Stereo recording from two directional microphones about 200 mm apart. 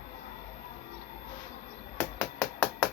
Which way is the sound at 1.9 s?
5° left (ahead or behind).